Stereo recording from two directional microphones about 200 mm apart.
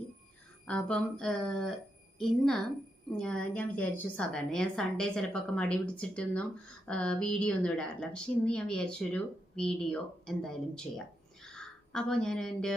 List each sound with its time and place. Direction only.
0.7 s a woman's voice: 5° left (ahead or behind)